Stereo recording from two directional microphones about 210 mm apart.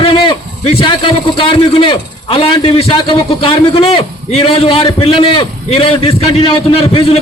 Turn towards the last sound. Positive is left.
turn(degrees=25)  # may be behind; listen again after turning